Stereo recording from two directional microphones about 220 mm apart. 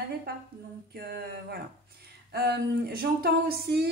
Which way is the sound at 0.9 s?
45° right (ahead or behind).